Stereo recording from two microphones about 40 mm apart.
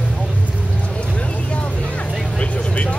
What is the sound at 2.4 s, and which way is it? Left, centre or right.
Vehicle, left.